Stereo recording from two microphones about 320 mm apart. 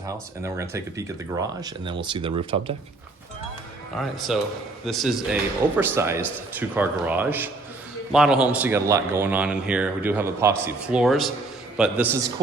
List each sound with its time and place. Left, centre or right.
0.0 s speech: centre
3.9 s a man's voice: centre